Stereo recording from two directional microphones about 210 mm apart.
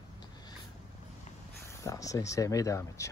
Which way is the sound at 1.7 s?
15° left (ahead or behind).